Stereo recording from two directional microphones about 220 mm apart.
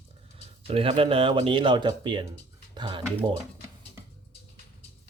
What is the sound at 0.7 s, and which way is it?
Speech, 25° right (ahead or behind).